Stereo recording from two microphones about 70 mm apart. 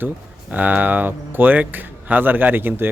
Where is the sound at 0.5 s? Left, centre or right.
Right.